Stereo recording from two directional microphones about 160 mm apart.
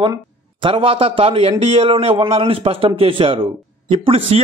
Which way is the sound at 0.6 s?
35° right (ahead or behind).